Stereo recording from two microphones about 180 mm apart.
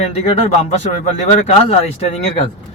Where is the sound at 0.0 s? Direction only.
35° left (ahead or behind).